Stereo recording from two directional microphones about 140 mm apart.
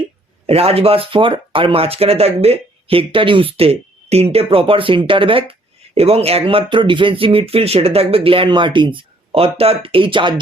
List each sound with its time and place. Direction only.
0.4 s speech: 45° right (ahead or behind)